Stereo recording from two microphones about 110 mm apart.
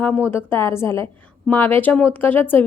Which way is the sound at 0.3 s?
20° left (ahead or behind).